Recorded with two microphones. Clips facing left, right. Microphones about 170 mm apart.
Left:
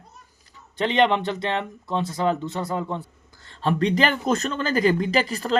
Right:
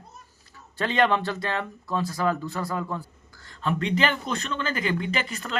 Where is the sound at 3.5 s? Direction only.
35° left (ahead or behind).